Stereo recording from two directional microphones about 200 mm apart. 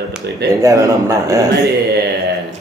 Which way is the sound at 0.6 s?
15° right (ahead or behind).